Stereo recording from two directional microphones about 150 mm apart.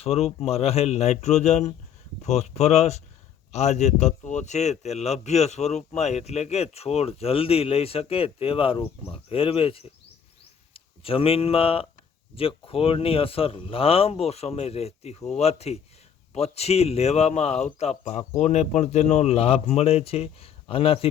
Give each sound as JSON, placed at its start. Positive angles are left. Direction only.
{"t": 0.0, "sound": "a man's voice", "side_deg": 40}